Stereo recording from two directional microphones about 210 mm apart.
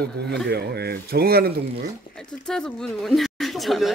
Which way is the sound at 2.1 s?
5° left (ahead or behind).